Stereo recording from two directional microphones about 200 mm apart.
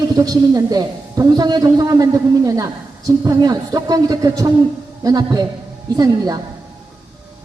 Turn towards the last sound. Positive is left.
turn(degrees=-20)  # may be behind; listen again after turning